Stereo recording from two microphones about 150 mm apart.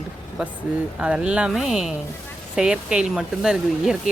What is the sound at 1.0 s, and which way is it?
A woman's voice, 5° right (ahead or behind).